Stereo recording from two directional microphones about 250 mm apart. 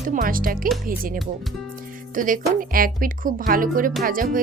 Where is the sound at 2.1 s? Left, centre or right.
Right.